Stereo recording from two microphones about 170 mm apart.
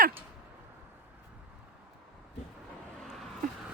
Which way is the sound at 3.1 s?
Centre (ahead or behind).